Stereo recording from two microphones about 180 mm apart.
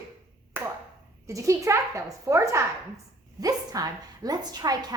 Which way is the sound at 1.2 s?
15° right (ahead or behind).